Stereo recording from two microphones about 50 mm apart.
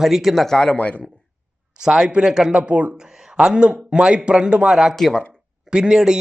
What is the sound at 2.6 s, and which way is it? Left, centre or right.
Speech, right.